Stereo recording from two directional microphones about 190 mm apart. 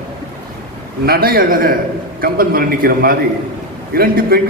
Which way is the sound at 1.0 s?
50° right (ahead or behind).